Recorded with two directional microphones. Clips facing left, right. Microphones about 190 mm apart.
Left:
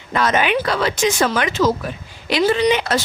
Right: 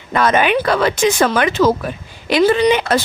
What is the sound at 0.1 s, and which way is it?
Speech, 55° right (ahead or behind).